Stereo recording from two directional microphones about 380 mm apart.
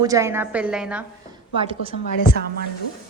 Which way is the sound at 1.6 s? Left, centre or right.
Centre.